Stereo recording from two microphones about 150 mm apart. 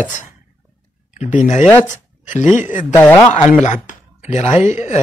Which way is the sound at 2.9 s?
15° left (ahead or behind).